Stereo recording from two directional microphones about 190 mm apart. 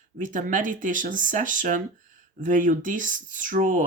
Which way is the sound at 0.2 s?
45° right (ahead or behind).